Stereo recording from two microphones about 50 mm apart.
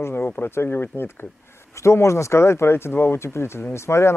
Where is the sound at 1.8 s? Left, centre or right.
Left.